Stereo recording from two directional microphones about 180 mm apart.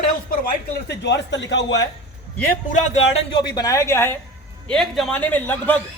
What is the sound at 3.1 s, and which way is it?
Speech, 25° left (ahead or behind).